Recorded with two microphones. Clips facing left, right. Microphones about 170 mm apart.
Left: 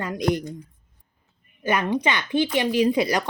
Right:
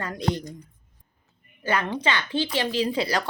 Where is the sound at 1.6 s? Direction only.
20° left (ahead or behind).